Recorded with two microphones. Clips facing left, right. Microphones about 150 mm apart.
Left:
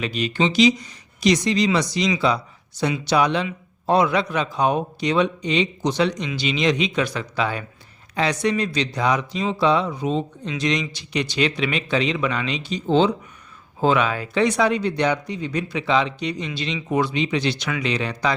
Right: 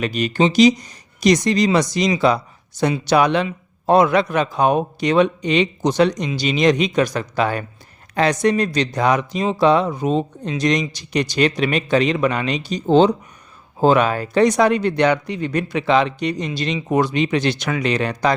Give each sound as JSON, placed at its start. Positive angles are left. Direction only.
{"t": 0.0, "sound": "speech", "side_deg": -45}